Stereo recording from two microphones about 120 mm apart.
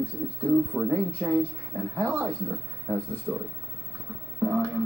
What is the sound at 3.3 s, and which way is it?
Speech, 10° right (ahead or behind).